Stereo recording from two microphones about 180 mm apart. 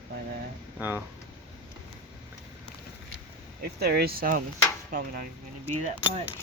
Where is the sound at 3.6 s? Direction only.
60° right (ahead or behind).